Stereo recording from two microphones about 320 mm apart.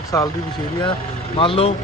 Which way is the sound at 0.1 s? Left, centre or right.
Centre.